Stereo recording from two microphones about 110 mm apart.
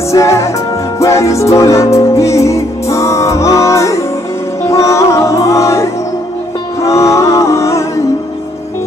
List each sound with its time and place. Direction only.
0.1 s music: 30° left (ahead or behind)